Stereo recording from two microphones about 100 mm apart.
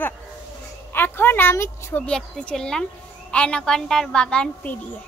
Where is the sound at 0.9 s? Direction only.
20° left (ahead or behind).